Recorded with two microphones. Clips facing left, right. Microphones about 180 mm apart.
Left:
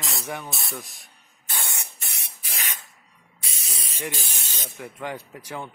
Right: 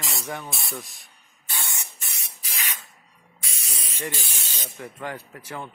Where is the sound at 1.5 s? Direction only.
60° left (ahead or behind).